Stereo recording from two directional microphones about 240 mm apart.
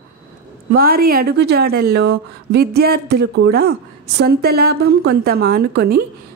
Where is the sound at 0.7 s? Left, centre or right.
Right.